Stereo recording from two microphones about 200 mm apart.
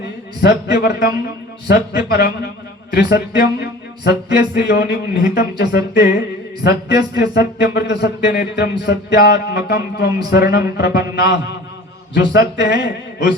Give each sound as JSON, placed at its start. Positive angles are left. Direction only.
{"t": 0.4, "sound": "speech", "side_deg": 55}